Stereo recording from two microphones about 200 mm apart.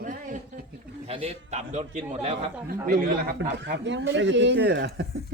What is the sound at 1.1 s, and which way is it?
A man's voice, 35° right (ahead or behind).